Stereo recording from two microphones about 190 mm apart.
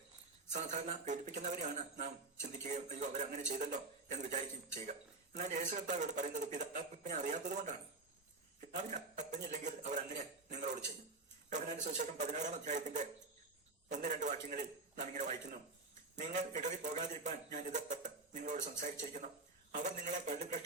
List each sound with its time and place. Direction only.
0.5 s a man's voice: 40° right (ahead or behind)
16.6 s a man's voice: 40° right (ahead or behind)